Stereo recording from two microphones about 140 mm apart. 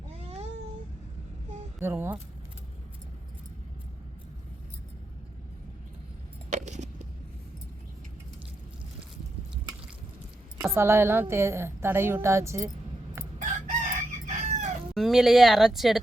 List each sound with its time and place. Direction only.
0.3 s cat: 45° right (ahead or behind)
1.8 s speech: 15° right (ahead or behind)
6.5 s a sound: 55° right (ahead or behind)
10.8 s a woman's voice: 20° right (ahead or behind)
13.4 s chicken: 60° right (ahead or behind)
14.9 s speech: centre (ahead or behind)